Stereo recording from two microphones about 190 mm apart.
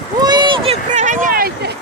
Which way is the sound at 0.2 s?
20° right (ahead or behind).